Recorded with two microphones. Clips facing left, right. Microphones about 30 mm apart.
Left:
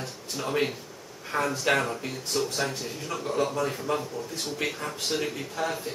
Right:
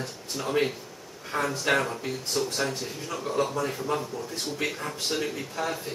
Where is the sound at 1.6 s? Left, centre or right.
Centre.